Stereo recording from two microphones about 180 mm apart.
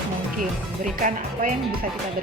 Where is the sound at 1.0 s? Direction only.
55° right (ahead or behind).